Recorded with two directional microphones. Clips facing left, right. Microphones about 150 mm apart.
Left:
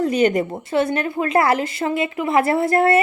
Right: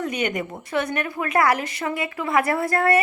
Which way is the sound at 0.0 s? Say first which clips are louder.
Left 8 dB; 35° left (ahead or behind).